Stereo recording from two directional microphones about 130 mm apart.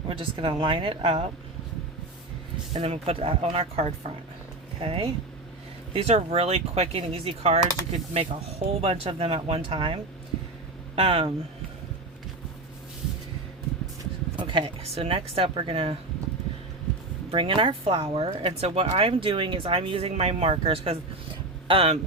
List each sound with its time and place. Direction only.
0.1 s speech: 45° right (ahead or behind)
2.8 s speech: 50° right (ahead or behind)
14.3 s speech: 40° right (ahead or behind)
17.3 s speech: 45° right (ahead or behind)